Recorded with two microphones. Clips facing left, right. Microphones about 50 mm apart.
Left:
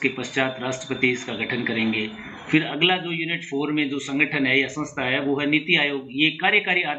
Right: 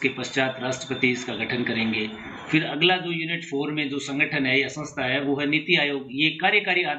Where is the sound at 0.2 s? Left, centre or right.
Centre.